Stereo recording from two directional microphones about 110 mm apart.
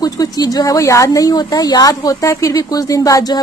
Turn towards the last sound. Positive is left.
turn(degrees=35)  # may be behind; listen again after turning